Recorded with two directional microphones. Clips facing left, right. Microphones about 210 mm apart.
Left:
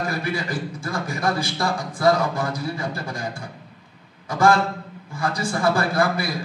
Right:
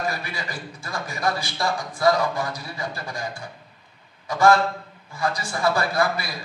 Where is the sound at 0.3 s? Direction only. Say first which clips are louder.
Left 7 dB; 55° left (ahead or behind).